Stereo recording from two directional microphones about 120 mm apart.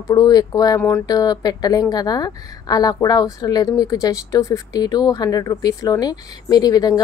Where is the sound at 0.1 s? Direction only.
35° left (ahead or behind).